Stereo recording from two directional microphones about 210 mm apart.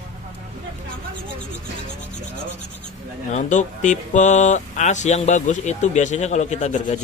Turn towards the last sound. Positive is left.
turn(degrees=30)  # may be behind; listen again after turning